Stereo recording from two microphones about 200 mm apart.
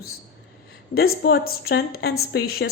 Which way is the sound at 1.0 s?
50° left (ahead or behind).